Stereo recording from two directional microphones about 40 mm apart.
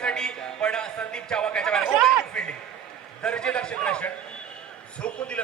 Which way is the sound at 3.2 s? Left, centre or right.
Left.